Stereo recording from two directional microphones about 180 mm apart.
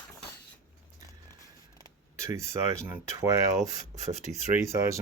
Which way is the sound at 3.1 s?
20° right (ahead or behind).